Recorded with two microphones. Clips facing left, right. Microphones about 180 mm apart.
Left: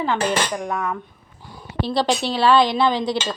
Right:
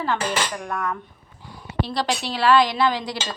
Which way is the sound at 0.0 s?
15° left (ahead or behind).